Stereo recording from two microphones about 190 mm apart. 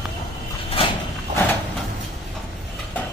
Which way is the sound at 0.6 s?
30° left (ahead or behind).